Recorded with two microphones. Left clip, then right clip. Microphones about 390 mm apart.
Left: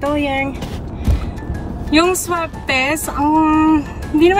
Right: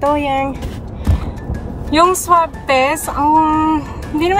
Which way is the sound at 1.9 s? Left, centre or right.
Centre.